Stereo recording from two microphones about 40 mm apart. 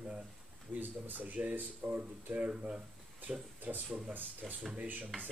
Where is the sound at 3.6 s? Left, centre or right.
Right.